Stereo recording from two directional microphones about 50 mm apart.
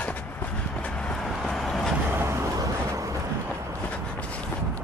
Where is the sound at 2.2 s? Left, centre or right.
Right.